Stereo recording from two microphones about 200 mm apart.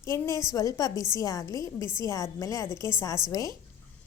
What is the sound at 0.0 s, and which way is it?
A woman's voice, 15° left (ahead or behind).